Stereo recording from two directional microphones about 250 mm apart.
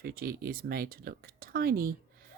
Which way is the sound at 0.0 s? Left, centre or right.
Right.